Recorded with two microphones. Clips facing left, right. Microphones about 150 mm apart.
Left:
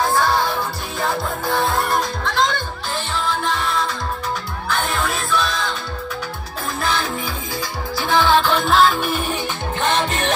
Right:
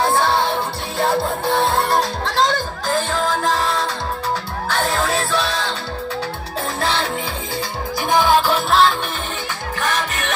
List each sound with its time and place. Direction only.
0.0 s music: 25° right (ahead or behind)
6.8 s music: 30° right (ahead or behind)
8.1 s music: 10° right (ahead or behind)
9.8 s music: 25° left (ahead or behind)